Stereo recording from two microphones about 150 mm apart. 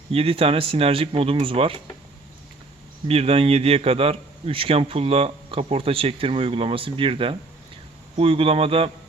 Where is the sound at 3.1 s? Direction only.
40° right (ahead or behind).